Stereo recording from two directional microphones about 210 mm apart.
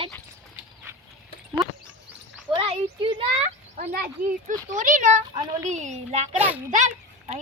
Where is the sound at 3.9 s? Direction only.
45° right (ahead or behind).